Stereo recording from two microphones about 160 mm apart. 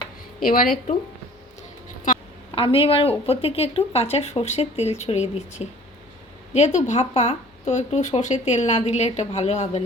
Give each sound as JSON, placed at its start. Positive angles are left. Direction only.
{"t": 0.4, "sound": "a woman's voice", "side_deg": 60}
{"t": 2.6, "sound": "speech", "side_deg": 35}